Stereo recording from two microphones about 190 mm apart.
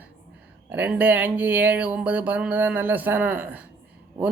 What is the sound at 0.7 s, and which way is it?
Speech, 10° right (ahead or behind).